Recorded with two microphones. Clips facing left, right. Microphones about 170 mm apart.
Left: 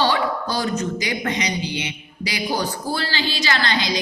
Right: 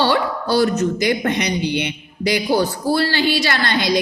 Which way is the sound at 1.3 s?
60° right (ahead or behind).